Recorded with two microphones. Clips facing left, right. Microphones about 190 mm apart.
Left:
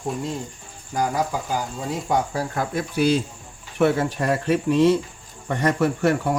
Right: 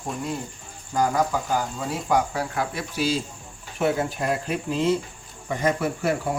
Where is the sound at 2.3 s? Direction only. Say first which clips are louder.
Left 2 dB; 45° left (ahead or behind).